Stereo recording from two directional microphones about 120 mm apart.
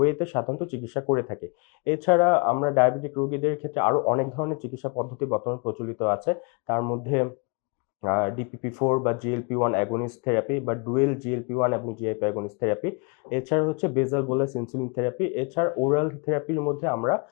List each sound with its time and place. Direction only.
0.0 s speech: 25° left (ahead or behind)